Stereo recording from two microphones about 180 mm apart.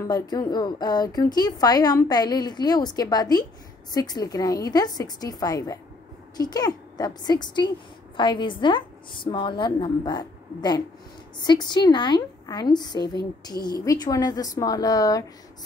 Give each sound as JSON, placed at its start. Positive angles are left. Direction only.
{"t": 0.0, "sound": "a woman's voice", "side_deg": 20}